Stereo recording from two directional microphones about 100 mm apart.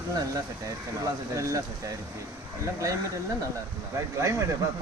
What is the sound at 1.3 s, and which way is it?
Speech, 30° right (ahead or behind).